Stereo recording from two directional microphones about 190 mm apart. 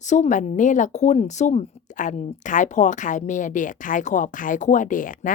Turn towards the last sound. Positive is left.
turn(degrees=45)  # may be behind; listen again after turning